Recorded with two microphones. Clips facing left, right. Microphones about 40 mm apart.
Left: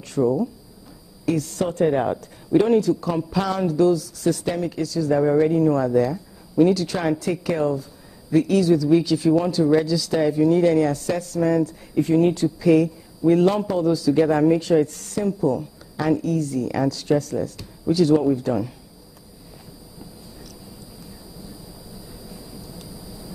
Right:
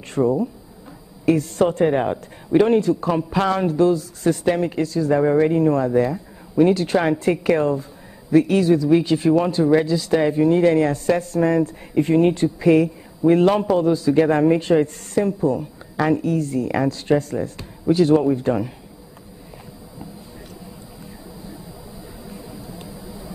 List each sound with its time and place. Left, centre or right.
0.1 s speech: right
21.4 s vehicle: right